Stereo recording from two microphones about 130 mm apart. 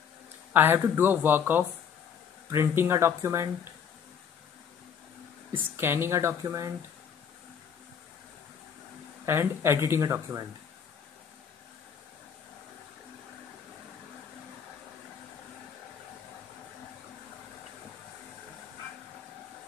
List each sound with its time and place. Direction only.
0.5 s speech: 15° right (ahead or behind)
5.8 s speech: 20° right (ahead or behind)
9.2 s speech: 20° right (ahead or behind)